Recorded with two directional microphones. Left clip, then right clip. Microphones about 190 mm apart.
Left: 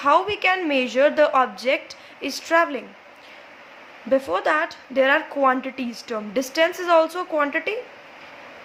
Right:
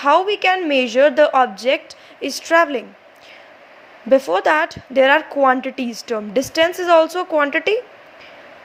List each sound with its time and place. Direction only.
0.0 s a woman's voice: 25° right (ahead or behind)
4.1 s a woman's voice: 30° right (ahead or behind)